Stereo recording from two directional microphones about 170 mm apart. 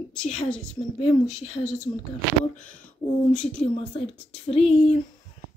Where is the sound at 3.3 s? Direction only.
5° left (ahead or behind).